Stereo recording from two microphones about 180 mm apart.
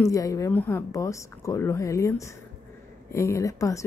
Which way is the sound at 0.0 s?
20° left (ahead or behind).